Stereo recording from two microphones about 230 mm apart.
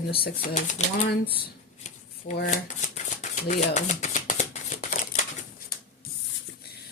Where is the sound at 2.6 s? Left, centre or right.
Left.